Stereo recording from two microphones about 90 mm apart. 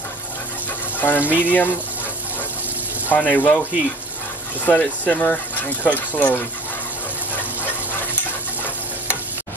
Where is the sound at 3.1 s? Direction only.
20° left (ahead or behind).